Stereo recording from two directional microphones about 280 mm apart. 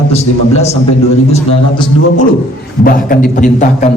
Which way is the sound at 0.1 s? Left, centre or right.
Left.